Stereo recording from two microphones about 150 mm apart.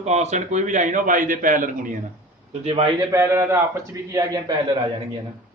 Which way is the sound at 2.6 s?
40° right (ahead or behind).